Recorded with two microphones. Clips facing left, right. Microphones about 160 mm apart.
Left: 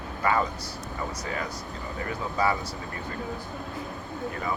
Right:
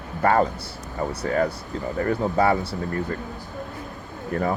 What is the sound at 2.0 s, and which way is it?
Speech, 50° right (ahead or behind).